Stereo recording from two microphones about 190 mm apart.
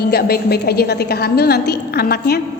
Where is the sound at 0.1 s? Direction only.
55° left (ahead or behind).